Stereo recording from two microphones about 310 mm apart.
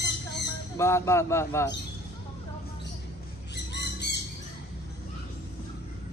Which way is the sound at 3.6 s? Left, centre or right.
Left.